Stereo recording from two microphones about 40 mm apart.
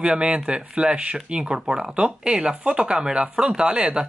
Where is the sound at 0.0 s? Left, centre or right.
Right.